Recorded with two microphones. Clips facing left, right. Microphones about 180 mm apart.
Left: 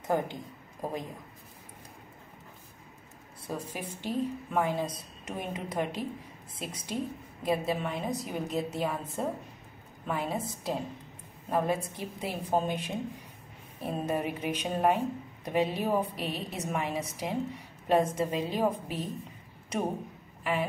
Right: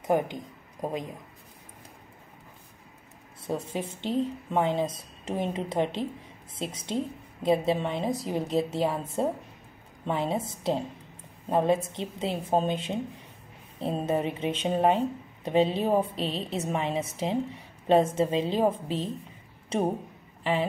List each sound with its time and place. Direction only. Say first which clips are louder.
0.0 s speech: right 4 dB; 20° right (ahead or behind)
3.4 s speech: right 5 dB; 25° right (ahead or behind)
10.0 s speech: right 4 dB; 25° right (ahead or behind)